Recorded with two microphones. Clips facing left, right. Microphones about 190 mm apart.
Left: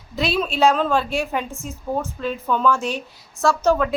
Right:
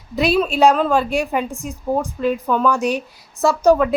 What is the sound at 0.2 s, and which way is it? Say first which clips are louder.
A woman's voice: right 4 dB; centre (ahead or behind).